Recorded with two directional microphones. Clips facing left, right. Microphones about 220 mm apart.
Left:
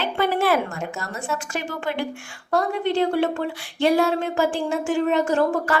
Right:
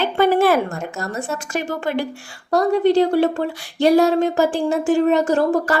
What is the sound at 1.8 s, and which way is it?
Speech, 40° right (ahead or behind).